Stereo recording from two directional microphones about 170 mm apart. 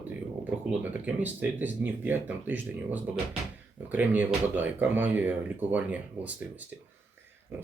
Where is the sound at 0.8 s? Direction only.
10° right (ahead or behind).